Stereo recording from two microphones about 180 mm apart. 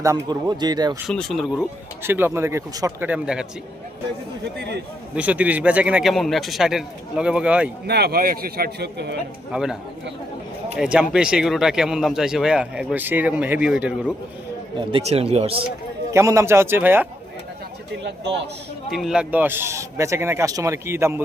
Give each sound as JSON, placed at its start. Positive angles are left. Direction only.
{"t": 0.3, "sound": "speech", "side_deg": -25}
{"t": 1.0, "sound": "speech", "side_deg": 0}
{"t": 2.0, "sound": "speech", "side_deg": -10}
{"t": 5.1, "sound": "speech", "side_deg": -10}
{"t": 7.9, "sound": "speech", "side_deg": -60}
{"t": 9.5, "sound": "speech", "side_deg": -5}
{"t": 10.8, "sound": "speech", "side_deg": -5}
{"t": 14.8, "sound": "speech", "side_deg": -30}
{"t": 16.1, "sound": "speech", "side_deg": -15}
{"t": 18.9, "sound": "speech", "side_deg": 0}